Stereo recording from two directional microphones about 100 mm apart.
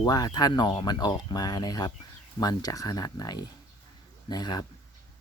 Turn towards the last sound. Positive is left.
turn(degrees=45)  # may be behind; listen again after turning